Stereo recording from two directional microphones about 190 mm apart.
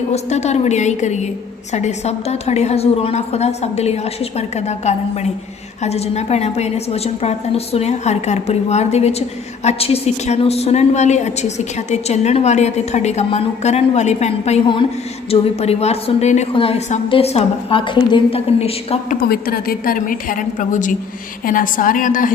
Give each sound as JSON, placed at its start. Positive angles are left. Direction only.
{"t": 0.1, "sound": "a woman's voice", "side_deg": 35}
{"t": 19.3, "sound": "a woman's voice", "side_deg": 55}